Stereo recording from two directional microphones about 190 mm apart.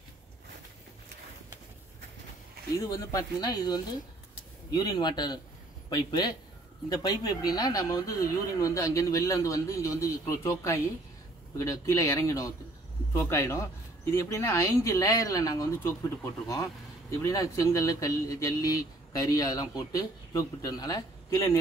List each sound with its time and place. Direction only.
2.9 s speech: 20° left (ahead or behind)
17.2 s speech: 15° left (ahead or behind)